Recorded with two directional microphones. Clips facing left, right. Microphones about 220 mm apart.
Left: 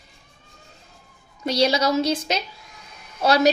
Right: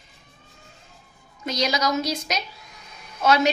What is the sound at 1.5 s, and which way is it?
A woman's voice, 30° left (ahead or behind).